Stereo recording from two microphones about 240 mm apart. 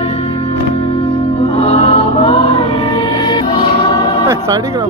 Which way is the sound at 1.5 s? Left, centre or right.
Left.